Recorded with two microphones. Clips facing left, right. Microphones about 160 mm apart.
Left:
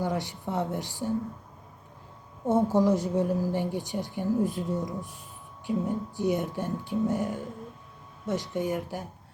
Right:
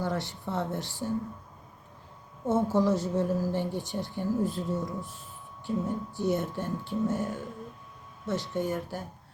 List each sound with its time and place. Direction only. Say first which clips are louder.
0.0 s a woman's voice: left 2 dB; 15° left (ahead or behind)
2.4 s a woman's voice: left 2 dB; 15° left (ahead or behind)